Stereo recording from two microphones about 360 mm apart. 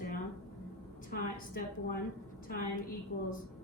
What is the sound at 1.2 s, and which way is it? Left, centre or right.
Speech, left.